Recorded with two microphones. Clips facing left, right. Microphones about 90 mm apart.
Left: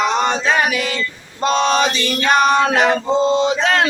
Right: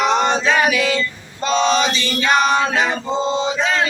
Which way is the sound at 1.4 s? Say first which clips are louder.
Left 1 dB; 50° left (ahead or behind).